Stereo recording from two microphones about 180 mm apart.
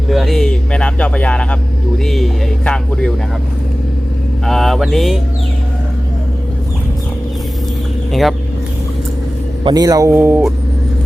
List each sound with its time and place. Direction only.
0.1 s a sound: centre (ahead or behind)
2.0 s speech: centre (ahead or behind)
4.4 s speech: centre (ahead or behind)
8.1 s speech: centre (ahead or behind)
9.6 s speech: 20° right (ahead or behind)